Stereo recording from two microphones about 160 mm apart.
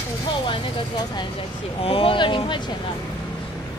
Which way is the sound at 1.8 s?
35° left (ahead or behind).